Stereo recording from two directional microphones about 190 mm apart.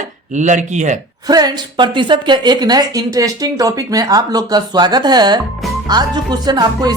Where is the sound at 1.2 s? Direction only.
20° right (ahead or behind).